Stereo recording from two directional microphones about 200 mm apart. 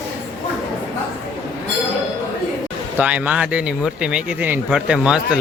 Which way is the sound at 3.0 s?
5° right (ahead or behind).